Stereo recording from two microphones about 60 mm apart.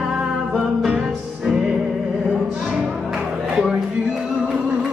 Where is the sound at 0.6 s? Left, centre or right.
Centre.